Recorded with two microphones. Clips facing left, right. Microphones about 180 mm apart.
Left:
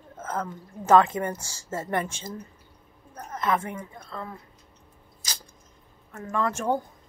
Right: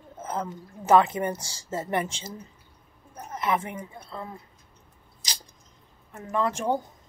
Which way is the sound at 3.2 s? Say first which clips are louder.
Left 1 dB; 10° right (ahead or behind).